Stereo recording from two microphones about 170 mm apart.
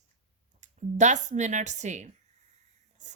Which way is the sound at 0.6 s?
45° right (ahead or behind).